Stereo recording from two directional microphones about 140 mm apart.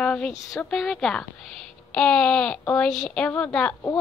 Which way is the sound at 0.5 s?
Centre (ahead or behind).